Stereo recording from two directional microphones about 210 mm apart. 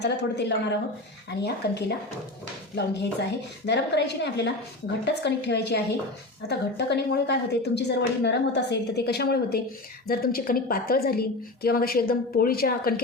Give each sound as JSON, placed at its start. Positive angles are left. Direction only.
{"t": 0.0, "sound": "a woman's voice", "side_deg": 55}